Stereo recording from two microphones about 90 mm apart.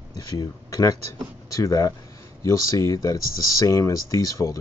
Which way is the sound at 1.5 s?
35° left (ahead or behind).